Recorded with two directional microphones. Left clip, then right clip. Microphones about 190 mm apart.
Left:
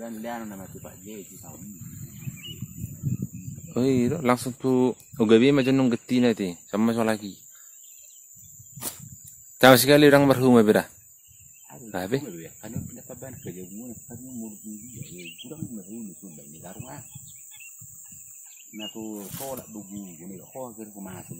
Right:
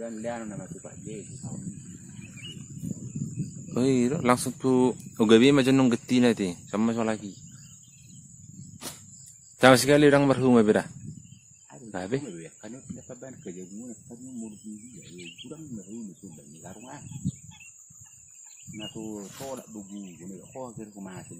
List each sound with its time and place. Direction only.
0.0 s speech: 45° left (ahead or behind)
3.7 s speech: 5° left (ahead or behind)
6.8 s a man's voice: 20° left (ahead or behind)
9.6 s speech: 15° left (ahead or behind)
11.9 s speech: 15° left (ahead or behind)
12.4 s a sound: 40° left (ahead or behind)
15.0 s cricket: 30° right (ahead or behind)
16.6 s a sound: 35° left (ahead or behind)
18.9 s speech: 40° left (ahead or behind)
19.9 s speech: 60° left (ahead or behind)
20.5 s speech: 35° left (ahead or behind)